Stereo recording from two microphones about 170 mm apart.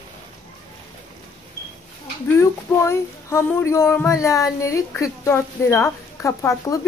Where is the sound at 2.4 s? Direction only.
15° left (ahead or behind).